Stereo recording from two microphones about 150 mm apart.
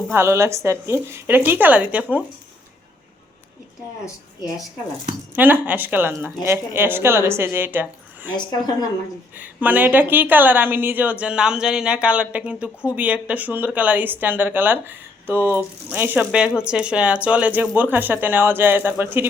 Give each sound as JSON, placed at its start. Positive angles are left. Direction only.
{"t": 0.1, "sound": "a woman's voice", "side_deg": -15}
{"t": 4.0, "sound": "speech", "side_deg": 25}
{"t": 5.3, "sound": "a woman's voice", "side_deg": -15}
{"t": 8.3, "sound": "speech", "side_deg": 30}
{"t": 9.4, "sound": "a woman's voice", "side_deg": -10}